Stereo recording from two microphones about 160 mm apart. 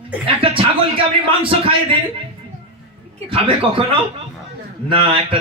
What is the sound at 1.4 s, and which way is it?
Speech, 35° right (ahead or behind).